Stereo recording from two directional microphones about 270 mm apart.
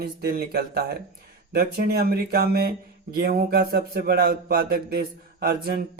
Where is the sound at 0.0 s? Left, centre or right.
Right.